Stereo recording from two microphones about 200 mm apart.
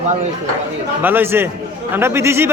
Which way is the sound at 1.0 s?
10° right (ahead or behind).